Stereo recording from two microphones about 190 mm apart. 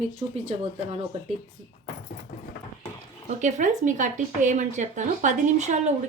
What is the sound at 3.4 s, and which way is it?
Speech, 40° right (ahead or behind).